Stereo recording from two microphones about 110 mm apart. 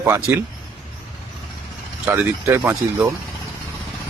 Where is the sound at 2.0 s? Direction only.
20° right (ahead or behind).